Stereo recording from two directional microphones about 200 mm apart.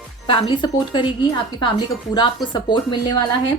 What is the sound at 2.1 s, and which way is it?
Speech, 20° left (ahead or behind).